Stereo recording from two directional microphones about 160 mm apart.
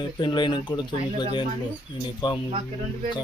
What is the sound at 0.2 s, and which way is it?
Speech, 30° left (ahead or behind).